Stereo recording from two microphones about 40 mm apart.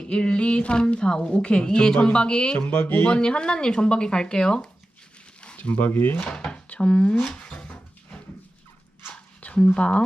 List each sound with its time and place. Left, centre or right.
0.1 s a woman's voice: left
2.6 s speech: left
3.1 s a woman's voice: left
5.6 s speech: left
6.2 s speech: left
7.2 s a sound: centre
9.7 s a woman's voice: left